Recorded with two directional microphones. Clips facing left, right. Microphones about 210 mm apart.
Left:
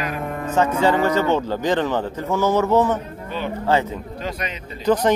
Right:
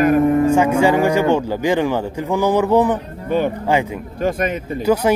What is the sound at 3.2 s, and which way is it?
Speech, 50° right (ahead or behind).